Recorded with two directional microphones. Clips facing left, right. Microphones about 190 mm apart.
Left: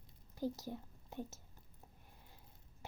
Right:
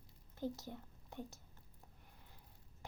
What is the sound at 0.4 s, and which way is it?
Speech, 20° right (ahead or behind).